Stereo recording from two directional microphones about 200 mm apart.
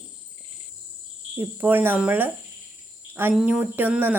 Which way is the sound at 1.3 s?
10° right (ahead or behind).